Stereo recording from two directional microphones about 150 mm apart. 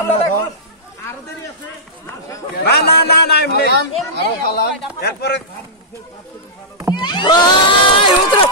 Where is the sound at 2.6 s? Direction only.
90° left.